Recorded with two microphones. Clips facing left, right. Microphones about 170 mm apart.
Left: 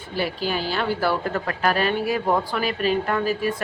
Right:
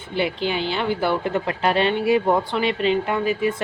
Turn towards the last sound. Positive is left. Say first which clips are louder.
# right 2 dB
turn(degrees=-15)  # may be behind; listen again after turning